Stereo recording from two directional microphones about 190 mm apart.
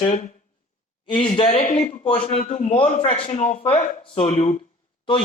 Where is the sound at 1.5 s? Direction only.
40° left (ahead or behind).